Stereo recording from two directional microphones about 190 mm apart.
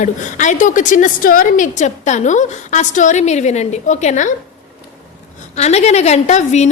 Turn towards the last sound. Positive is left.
turn(degrees=35)  # may be behind; listen again after turning